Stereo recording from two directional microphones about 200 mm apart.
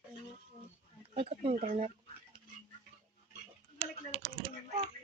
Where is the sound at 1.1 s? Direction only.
30° right (ahead or behind).